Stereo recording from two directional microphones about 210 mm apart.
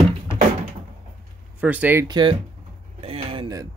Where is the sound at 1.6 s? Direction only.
5° right (ahead or behind).